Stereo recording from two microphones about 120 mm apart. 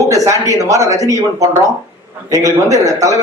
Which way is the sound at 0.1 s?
25° right (ahead or behind).